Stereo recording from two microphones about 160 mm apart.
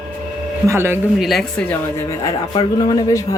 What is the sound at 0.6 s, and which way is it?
Speech, 15° right (ahead or behind).